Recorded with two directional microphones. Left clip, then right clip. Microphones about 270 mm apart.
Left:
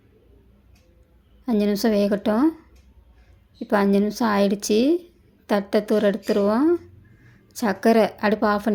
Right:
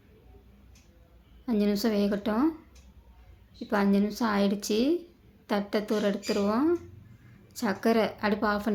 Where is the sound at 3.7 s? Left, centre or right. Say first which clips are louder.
Left 7 dB; left.